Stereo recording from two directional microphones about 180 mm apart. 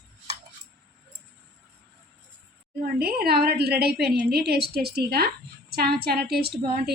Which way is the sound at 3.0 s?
60° right (ahead or behind).